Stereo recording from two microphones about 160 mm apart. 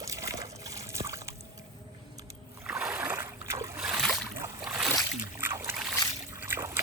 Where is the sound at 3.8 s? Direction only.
5° right (ahead or behind).